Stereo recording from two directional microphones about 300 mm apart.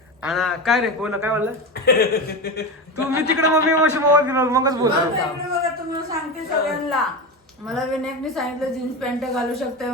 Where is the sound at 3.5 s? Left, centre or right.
Centre.